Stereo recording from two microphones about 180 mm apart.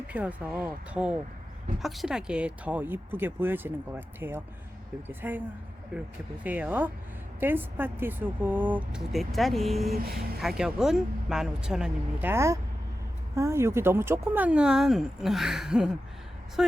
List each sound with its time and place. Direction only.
0.1 s speech: 10° right (ahead or behind)
6.4 s speech: 10° right (ahead or behind)
9.9 s speech: 60° right (ahead or behind)
10.6 s speech: 5° right (ahead or behind)